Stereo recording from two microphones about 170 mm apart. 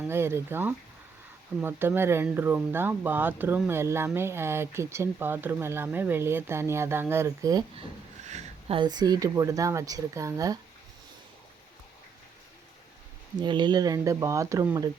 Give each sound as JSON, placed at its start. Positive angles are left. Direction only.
{"t": 0.1, "sound": "speech", "side_deg": -15}
{"t": 8.3, "sound": "speech", "side_deg": -35}
{"t": 13.4, "sound": "speech", "side_deg": -25}